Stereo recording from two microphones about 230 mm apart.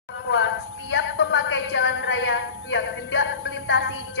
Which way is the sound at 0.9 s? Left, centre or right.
Left.